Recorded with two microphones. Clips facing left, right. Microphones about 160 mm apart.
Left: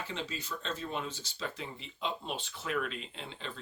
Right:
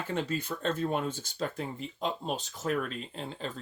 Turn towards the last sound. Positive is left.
turn(degrees=-40)  # may be behind; listen again after turning